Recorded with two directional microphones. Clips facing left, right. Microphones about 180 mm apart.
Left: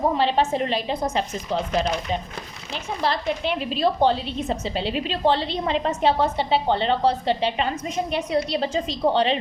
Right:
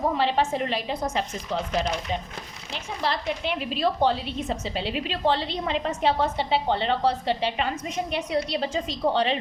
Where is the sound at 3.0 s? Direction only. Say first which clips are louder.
Left 3 dB; 30° left (ahead or behind).